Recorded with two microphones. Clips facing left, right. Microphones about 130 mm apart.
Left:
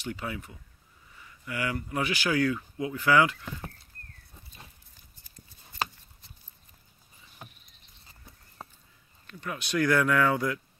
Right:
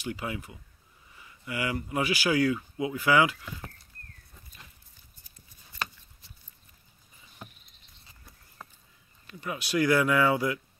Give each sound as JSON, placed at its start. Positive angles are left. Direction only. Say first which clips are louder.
{"t": 0.0, "sound": "speech", "louder": "right 1 dB", "side_deg": -10}
{"t": 8.6, "sound": "a sound", "louder": "left 2 dB", "side_deg": 25}
{"t": 9.3, "sound": "speech", "louder": "right 1 dB", "side_deg": -10}